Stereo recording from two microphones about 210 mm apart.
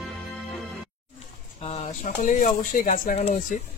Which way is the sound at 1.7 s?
35° left (ahead or behind).